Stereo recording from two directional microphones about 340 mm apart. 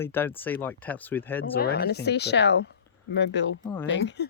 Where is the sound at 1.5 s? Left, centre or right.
Left.